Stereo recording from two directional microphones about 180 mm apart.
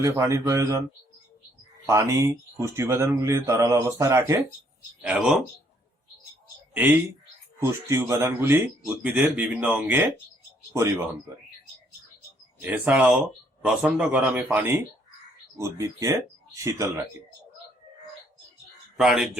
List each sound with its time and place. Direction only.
0.0 s a man's voice: 15° right (ahead or behind)
1.9 s a man's voice: 15° right (ahead or behind)
7.6 s a man's voice: 15° right (ahead or behind)
12.6 s a man's voice: 10° right (ahead or behind)
18.9 s speech: centre (ahead or behind)